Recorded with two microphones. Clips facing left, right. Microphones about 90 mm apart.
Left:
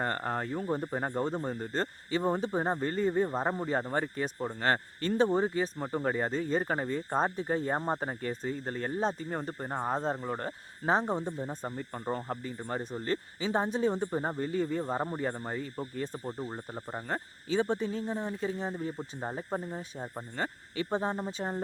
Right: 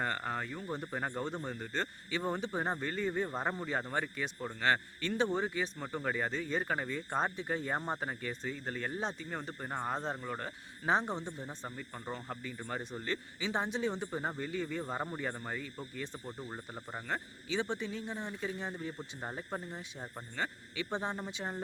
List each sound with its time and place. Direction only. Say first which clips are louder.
0.0 s speech: left 4 dB; 35° left (ahead or behind)
0.8 s speech: left 5 dB; 30° left (ahead or behind)
17.1 s speech: left 4 dB; 40° left (ahead or behind)
18.9 s speech: left 5 dB; 20° left (ahead or behind)
19.4 s speech: left 5 dB; 35° left (ahead or behind)